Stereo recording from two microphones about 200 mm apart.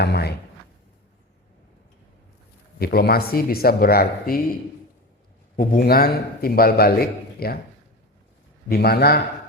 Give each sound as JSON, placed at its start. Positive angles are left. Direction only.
{"t": 0.0, "sound": "speech", "side_deg": 55}
{"t": 2.7, "sound": "a man's voice", "side_deg": 50}
{"t": 5.5, "sound": "a man's voice", "side_deg": 45}
{"t": 8.7, "sound": "a man's voice", "side_deg": 50}